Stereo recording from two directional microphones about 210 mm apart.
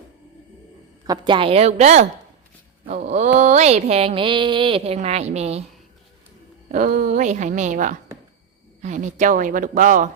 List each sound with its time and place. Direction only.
1.0 s speech: 20° right (ahead or behind)
6.7 s speech: 40° right (ahead or behind)